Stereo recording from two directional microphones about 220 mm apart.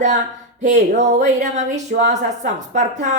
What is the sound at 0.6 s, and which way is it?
Speech, 35° right (ahead or behind).